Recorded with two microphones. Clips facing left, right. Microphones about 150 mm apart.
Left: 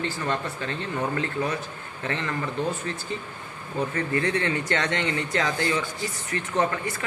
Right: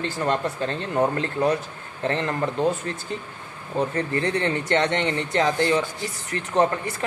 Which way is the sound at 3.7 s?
35° right (ahead or behind).